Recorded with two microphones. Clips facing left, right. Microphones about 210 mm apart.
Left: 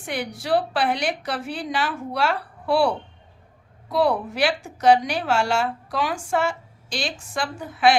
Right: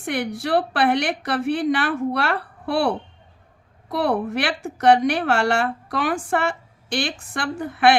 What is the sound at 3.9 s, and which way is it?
A woman's voice, 60° right (ahead or behind).